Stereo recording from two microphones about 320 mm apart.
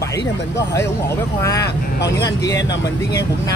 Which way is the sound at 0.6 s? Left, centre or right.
Centre.